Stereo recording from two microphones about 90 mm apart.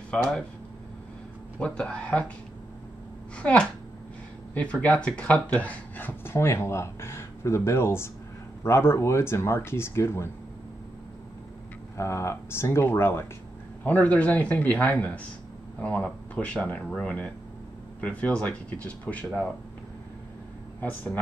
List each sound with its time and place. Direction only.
1.6 s speech: 10° left (ahead or behind)
3.3 s speech: 10° left (ahead or behind); by 10.3 s 30° left (ahead or behind)
12.0 s speech: 30° left (ahead or behind); by 19.5 s 10° left (ahead or behind)
20.8 s speech: 20° left (ahead or behind)